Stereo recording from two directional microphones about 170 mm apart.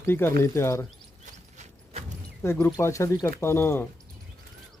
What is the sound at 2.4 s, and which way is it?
Speech, 15° left (ahead or behind).